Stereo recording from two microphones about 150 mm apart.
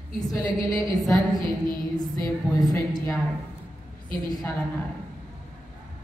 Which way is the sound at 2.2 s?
25° left (ahead or behind).